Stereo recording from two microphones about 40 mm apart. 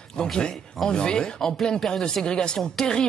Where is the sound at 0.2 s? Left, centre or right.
Centre.